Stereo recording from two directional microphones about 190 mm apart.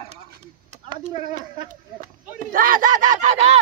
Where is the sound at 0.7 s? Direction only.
35° right (ahead or behind).